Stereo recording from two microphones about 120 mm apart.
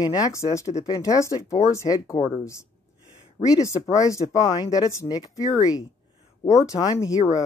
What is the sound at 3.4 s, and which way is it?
Speech, 30° left (ahead or behind).